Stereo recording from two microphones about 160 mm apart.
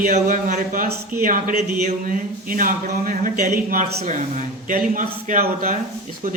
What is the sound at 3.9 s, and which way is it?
Speech, 45° right (ahead or behind).